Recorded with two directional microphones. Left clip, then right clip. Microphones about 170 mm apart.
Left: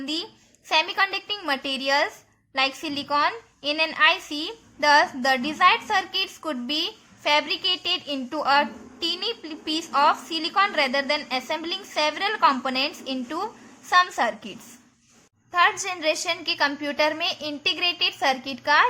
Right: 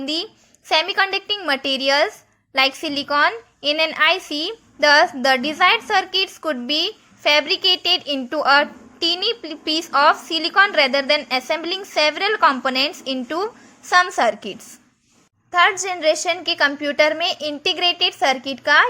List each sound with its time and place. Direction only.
0.0 s a woman's voice: 30° right (ahead or behind)